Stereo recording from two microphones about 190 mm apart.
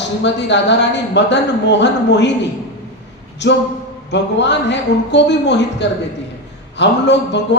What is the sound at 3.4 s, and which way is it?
Speech, 65° left (ahead or behind).